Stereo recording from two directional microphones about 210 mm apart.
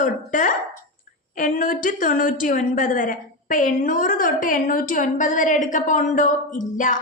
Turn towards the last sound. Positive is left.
turn(degrees=40)  # may be behind; listen again after turning